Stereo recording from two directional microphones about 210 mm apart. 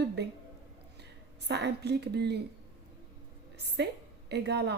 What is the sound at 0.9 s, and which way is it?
A woman's voice, 55° right (ahead or behind).